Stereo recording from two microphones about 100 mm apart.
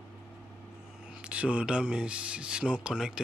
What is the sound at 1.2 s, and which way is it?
Speech, 10° right (ahead or behind).